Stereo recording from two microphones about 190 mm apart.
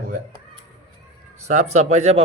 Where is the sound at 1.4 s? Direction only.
35° right (ahead or behind).